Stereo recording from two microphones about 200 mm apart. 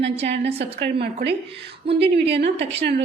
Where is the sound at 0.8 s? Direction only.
55° right (ahead or behind).